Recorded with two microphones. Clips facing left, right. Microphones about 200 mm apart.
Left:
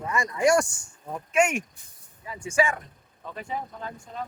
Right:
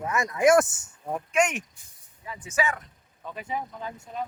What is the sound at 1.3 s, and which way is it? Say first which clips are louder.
Speech: left 2 dB; 10° left (ahead or behind).